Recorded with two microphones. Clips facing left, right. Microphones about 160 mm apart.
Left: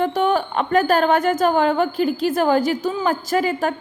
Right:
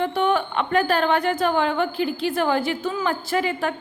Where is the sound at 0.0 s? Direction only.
40° left (ahead or behind).